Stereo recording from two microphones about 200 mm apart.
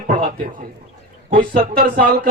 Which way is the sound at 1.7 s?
45° right (ahead or behind).